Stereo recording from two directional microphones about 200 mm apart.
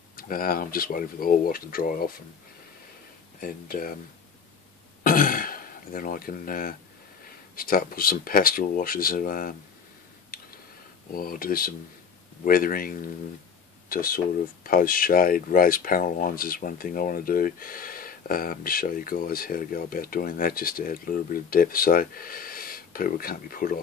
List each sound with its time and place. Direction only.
0.1 s speech: 45° left (ahead or behind)
3.3 s speech: 45° left (ahead or behind)
5.0 s throat clearing: 45° left (ahead or behind)
7.5 s speech: 45° left (ahead or behind)
10.3 s a sound: 45° left (ahead or behind)
11.1 s speech: 45° left (ahead or behind)